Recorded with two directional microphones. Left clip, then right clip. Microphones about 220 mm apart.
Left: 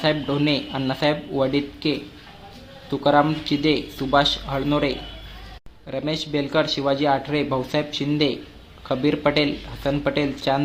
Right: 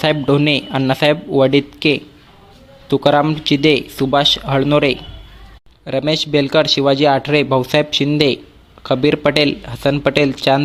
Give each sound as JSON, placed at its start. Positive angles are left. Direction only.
{"t": 0.0, "sound": "a man's voice", "side_deg": -30}